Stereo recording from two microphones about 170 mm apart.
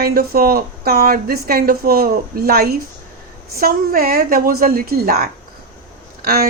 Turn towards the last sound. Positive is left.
turn(degrees=-60)  # may be behind; listen again after turning